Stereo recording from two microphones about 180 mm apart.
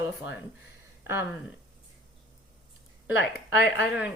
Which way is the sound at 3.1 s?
80° left.